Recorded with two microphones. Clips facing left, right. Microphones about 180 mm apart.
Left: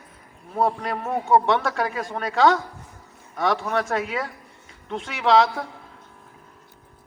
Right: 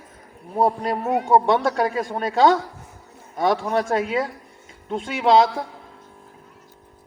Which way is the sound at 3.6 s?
30° right (ahead or behind).